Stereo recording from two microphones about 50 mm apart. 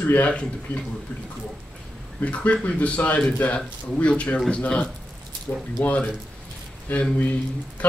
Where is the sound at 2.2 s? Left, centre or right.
Left.